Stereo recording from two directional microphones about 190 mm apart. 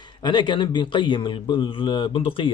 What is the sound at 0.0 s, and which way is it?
A man's voice, 25° left (ahead or behind).